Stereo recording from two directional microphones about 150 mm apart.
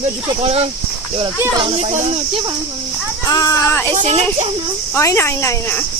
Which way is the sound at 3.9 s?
50° right (ahead or behind).